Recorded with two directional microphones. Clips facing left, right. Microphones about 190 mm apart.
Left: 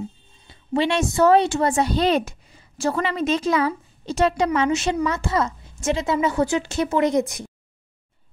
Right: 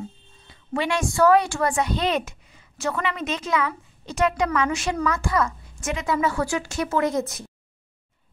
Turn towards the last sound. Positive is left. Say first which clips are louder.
# left 4 dB
turn(degrees=15)  # may be behind; listen again after turning